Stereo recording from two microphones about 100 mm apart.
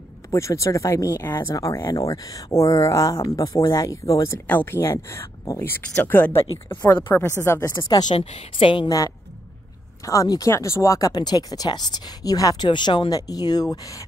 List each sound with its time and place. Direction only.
0.3 s speech: 30° left (ahead or behind)
4.5 s speech: 20° left (ahead or behind)
7.6 s speech: 45° left (ahead or behind)
8.2 s a woman's voice: 90° left; by 8.8 s 65° left (ahead or behind)
8.8 s speech: 35° left (ahead or behind)
12.6 s speech: 50° left (ahead or behind)
13.1 s speech: 40° left (ahead or behind)